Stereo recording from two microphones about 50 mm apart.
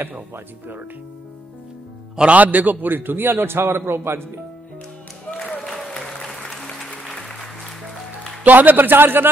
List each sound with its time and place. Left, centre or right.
2.1 s a man's voice: right
5.7 s applause: centre
7.1 s music: centre
8.5 s a man's voice: right